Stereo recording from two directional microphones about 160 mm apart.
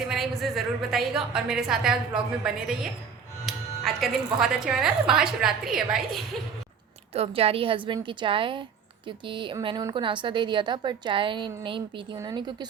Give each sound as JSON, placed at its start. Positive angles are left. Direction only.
{"t": 0.1, "sound": "a woman's voice", "side_deg": 0}
{"t": 7.1, "sound": "a woman's voice", "side_deg": -40}